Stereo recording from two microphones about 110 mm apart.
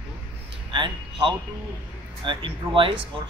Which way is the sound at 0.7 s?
50° right (ahead or behind).